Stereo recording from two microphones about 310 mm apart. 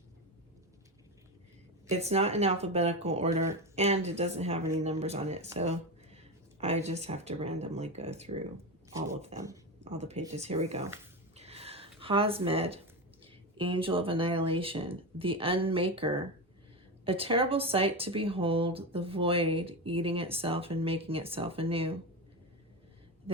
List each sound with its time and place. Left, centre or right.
1.9 s speech: right
3.4 s speech: centre
3.8 s speech: right
8.9 s speech: centre
9.8 s speech: right
11.3 s a sound: centre
13.6 s speech: centre